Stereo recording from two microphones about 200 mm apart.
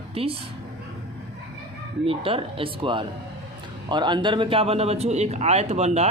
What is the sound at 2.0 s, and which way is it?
Speech, 25° right (ahead or behind).